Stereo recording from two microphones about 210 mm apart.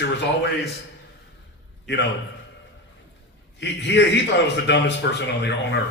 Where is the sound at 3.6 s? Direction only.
55° left (ahead or behind).